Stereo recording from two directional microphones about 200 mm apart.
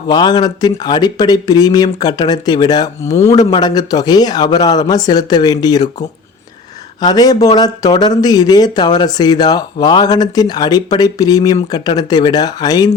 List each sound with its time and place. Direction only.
0.1 s speech: 20° left (ahead or behind)
7.0 s speech: 20° left (ahead or behind)